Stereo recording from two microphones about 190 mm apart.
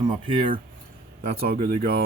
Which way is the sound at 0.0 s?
25° right (ahead or behind).